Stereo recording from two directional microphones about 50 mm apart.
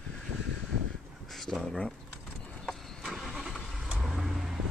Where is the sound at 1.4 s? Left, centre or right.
Centre.